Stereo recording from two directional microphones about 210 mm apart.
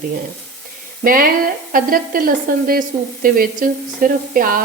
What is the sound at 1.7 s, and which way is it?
Speech, 40° right (ahead or behind).